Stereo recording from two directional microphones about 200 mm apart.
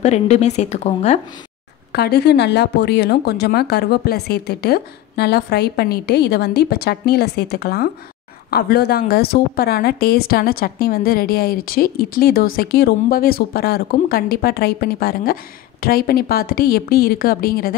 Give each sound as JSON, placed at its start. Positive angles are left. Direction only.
{"t": 0.0, "sound": "a woman's voice", "side_deg": 35}
{"t": 1.9, "sound": "a woman's voice", "side_deg": 55}